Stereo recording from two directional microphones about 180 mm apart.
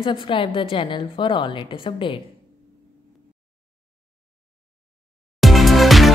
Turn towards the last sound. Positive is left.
turn(degrees=0)  # may be behind; listen again after turning